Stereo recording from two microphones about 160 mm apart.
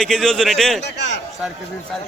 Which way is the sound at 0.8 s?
90° left.